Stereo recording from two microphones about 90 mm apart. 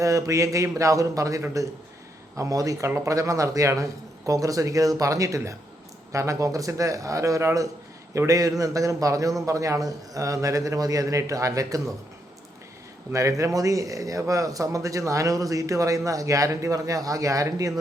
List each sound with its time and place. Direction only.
0.0 s speech: 35° right (ahead or behind)
13.1 s speech: 35° right (ahead or behind)